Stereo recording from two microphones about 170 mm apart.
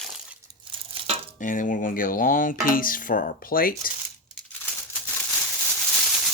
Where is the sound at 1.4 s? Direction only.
50° left (ahead or behind).